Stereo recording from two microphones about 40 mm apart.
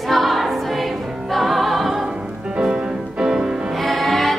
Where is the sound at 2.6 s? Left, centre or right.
Right.